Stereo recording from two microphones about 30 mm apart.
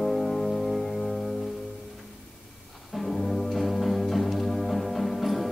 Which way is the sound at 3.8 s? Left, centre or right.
Centre.